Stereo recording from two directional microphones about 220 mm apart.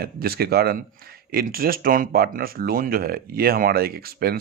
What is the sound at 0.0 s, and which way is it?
Speech, 45° right (ahead or behind).